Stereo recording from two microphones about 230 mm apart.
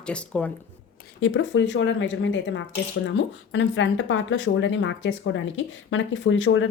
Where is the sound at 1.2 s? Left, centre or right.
Left.